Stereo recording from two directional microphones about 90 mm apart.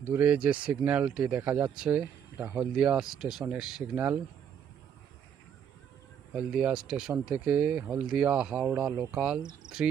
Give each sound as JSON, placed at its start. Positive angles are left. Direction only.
{"t": 0.1, "sound": "speech", "side_deg": -15}
{"t": 6.3, "sound": "speech", "side_deg": -10}